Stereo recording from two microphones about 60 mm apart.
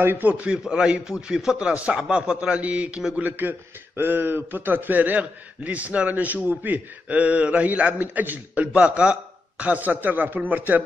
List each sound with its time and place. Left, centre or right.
0.0 s a man's voice: right
0.3 s a man's voice: centre